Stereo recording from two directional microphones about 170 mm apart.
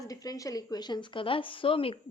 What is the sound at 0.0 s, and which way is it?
Speech, 20° left (ahead or behind).